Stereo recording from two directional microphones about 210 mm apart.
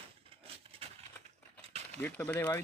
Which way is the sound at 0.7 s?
25° right (ahead or behind).